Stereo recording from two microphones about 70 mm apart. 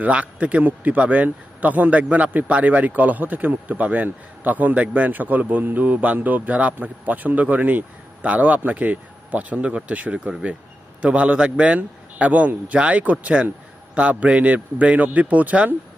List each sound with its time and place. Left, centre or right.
0.0 s a man's voice: right